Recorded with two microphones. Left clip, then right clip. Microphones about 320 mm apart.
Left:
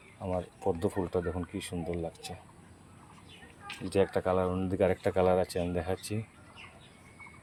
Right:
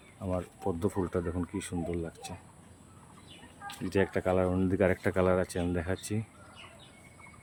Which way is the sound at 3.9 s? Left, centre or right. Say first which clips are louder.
Left 1 dB; centre.